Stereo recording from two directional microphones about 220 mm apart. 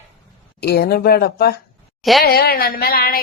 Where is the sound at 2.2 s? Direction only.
45° left (ahead or behind).